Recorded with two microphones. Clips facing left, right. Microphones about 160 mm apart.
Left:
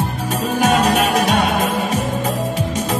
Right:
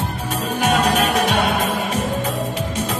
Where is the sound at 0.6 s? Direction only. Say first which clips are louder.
Left 2 dB; 45° left (ahead or behind).